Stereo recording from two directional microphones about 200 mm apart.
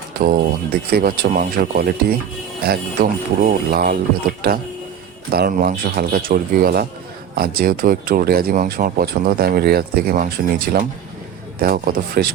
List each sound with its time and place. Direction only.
0.3 s speech: 50° right (ahead or behind)
5.3 s speech: 45° right (ahead or behind)